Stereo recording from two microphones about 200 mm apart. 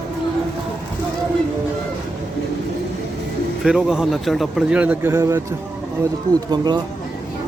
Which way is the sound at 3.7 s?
5° right (ahead or behind).